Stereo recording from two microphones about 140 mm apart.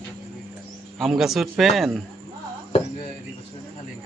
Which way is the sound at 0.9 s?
Centre (ahead or behind).